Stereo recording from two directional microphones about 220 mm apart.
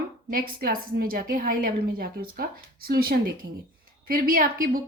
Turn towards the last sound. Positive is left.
turn(degrees=-40)  # may be behind; listen again after turning